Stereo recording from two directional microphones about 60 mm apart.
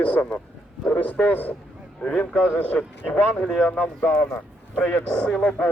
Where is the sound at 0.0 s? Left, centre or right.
Left.